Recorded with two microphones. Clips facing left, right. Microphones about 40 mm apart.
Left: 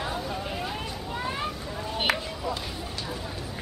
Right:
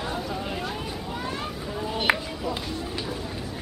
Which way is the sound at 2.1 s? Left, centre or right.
Right.